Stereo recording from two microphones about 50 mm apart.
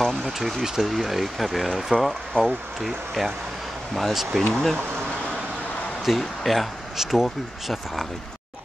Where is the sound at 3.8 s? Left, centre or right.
Centre.